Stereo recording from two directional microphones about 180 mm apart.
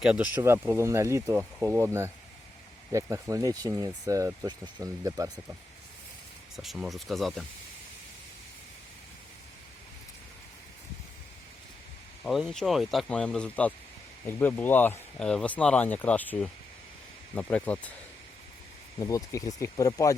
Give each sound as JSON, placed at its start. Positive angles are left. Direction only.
{"t": 0.0, "sound": "speech", "side_deg": -5}
{"t": 2.9, "sound": "speech", "side_deg": -15}
{"t": 6.6, "sound": "speech", "side_deg": 0}
{"t": 12.2, "sound": "speech", "side_deg": 0}
{"t": 18.9, "sound": "speech", "side_deg": 15}